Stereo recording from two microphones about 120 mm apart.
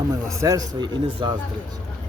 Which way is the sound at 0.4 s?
35° right (ahead or behind).